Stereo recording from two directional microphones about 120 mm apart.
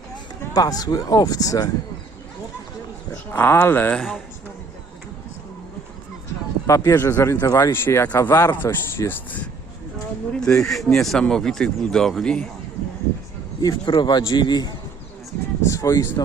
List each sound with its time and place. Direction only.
0.5 s speech: 30° left (ahead or behind)
3.3 s speech: 20° left (ahead or behind)
6.7 s speech: 25° left (ahead or behind)
10.4 s speech: 5° left (ahead or behind)
13.6 s speech: 35° left (ahead or behind)